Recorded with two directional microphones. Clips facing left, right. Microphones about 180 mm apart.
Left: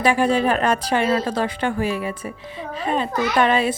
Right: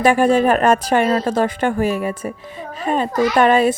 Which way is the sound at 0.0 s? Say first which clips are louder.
Right 4 dB; 50° right (ahead or behind).